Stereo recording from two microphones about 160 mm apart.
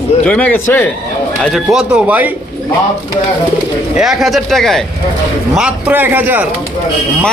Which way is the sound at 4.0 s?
Centre (ahead or behind).